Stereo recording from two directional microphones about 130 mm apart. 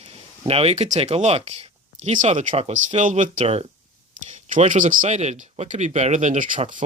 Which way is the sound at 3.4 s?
50° right (ahead or behind).